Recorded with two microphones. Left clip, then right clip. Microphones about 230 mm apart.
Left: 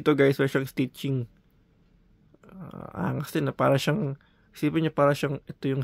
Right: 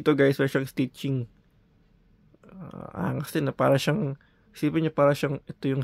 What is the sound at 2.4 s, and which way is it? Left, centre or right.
Speech, centre.